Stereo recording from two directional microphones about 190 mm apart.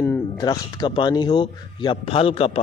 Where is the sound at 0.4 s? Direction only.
20° left (ahead or behind).